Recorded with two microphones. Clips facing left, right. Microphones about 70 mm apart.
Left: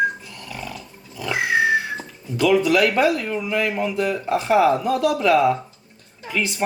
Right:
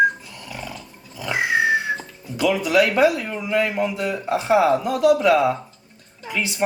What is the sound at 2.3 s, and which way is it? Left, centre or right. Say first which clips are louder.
Speech: left 1 dB; centre.